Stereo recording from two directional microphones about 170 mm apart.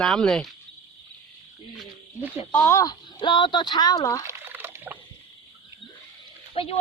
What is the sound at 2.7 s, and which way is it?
Speech, 25° left (ahead or behind).